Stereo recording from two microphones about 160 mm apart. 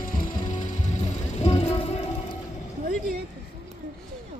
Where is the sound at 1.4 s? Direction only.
35° left (ahead or behind).